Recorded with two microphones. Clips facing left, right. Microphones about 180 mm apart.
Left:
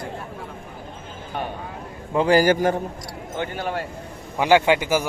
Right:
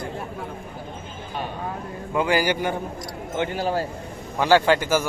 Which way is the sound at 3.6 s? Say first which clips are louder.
Right 4 dB; 30° right (ahead or behind).